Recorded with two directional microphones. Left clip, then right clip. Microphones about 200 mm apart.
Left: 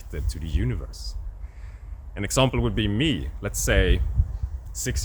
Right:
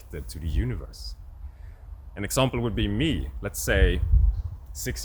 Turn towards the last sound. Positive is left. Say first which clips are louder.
# left 3 dB
turn(degrees=10)  # may be behind; listen again after turning